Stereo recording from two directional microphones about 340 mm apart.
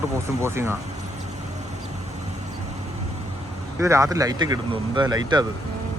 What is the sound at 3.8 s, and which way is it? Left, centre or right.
Speech, centre.